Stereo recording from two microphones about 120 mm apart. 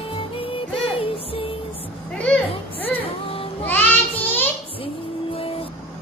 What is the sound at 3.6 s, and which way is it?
Child singing, 15° left (ahead or behind).